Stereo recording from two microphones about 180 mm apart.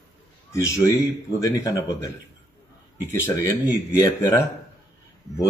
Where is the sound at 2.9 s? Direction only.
10° right (ahead or behind).